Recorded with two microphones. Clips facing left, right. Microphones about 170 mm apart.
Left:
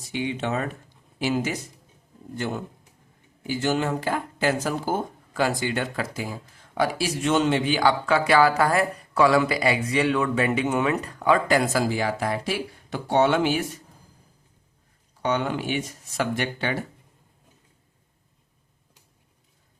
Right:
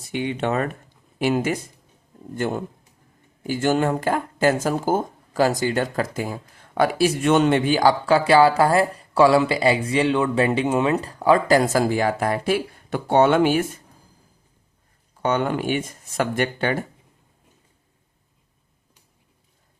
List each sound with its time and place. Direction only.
0.1 s speech: 55° right (ahead or behind); by 11.8 s 35° right (ahead or behind)
11.8 s speech: 50° right (ahead or behind)
15.2 s speech: 50° right (ahead or behind)